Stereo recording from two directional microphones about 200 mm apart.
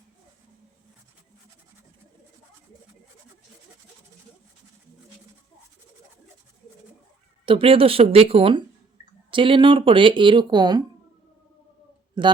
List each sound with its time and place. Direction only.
7.4 s speech: 25° right (ahead or behind)
12.2 s speech: 20° right (ahead or behind)